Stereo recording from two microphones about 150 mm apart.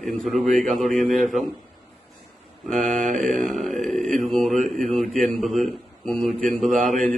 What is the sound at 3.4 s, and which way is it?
A man's voice, centre (ahead or behind).